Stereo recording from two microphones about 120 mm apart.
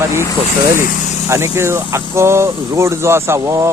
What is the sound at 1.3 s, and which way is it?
Speech, 20° right (ahead or behind).